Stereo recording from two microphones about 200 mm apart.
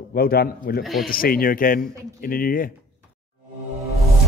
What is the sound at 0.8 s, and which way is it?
Speech, centre (ahead or behind).